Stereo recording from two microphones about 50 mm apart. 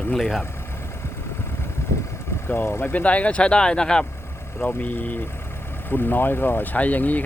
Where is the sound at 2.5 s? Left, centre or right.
Left.